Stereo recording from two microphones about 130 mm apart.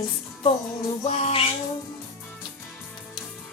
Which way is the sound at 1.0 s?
50° left (ahead or behind).